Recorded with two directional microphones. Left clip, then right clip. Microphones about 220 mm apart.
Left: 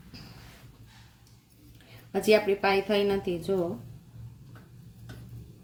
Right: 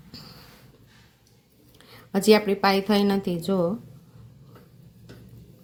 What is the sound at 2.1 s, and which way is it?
A woman's voice, 35° right (ahead or behind).